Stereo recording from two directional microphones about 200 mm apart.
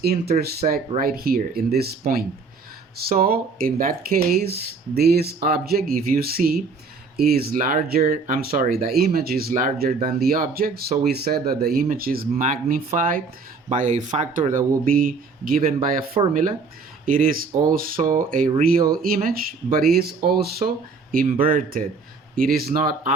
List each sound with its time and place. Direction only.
0.0 s speech: 50° right (ahead or behind)
16.2 s speech: 25° right (ahead or behind)
17.1 s speech: 45° right (ahead or behind)